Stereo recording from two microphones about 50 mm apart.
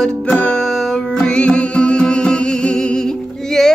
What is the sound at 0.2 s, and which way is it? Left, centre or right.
Music, left.